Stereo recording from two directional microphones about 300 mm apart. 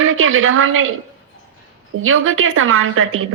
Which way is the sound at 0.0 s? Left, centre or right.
Right.